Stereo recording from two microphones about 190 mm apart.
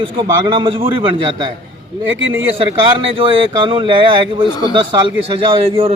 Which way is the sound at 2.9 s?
30° right (ahead or behind).